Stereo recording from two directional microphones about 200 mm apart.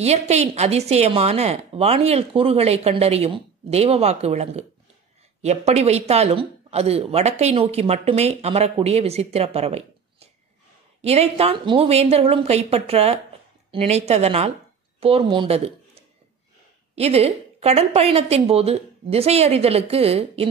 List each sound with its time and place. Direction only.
0.0 s a woman's voice: 35° right (ahead or behind)
16.9 s speech: 30° right (ahead or behind)